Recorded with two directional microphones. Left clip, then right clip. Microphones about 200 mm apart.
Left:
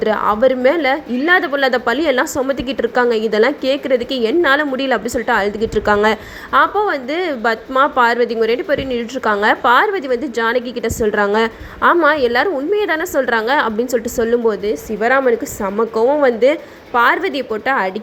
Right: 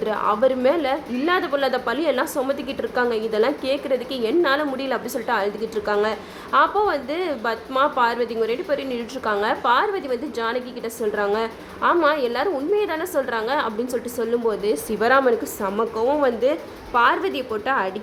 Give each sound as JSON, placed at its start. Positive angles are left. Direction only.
{"t": 0.0, "sound": "a woman's voice", "side_deg": 20}
{"t": 14.7, "sound": "a woman's voice", "side_deg": 5}